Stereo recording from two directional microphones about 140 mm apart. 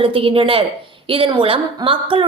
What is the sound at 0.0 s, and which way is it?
A woman's voice, 40° right (ahead or behind).